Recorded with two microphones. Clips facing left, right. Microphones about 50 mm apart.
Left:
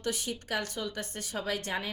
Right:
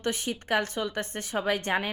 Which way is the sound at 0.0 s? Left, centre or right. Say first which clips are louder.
Right 4 dB; right.